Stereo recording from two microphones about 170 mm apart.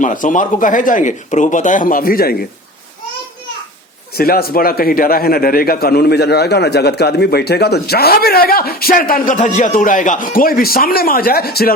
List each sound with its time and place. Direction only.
0.0 s speech: 50° left (ahead or behind)
4.2 s a man's voice: 65° left (ahead or behind)